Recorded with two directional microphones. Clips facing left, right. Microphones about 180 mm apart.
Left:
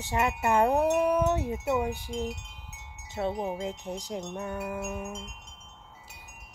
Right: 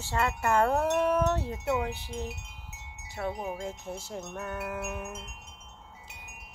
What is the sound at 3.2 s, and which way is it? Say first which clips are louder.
Speech: left 3 dB; 20° left (ahead or behind).